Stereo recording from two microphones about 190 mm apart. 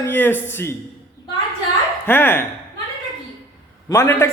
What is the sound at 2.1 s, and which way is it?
Speech, 10° left (ahead or behind).